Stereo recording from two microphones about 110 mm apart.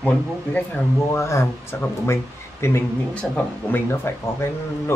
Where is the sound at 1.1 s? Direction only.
25° left (ahead or behind).